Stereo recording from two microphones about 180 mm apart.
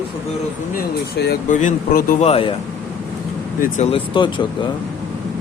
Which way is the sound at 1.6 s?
45° left (ahead or behind).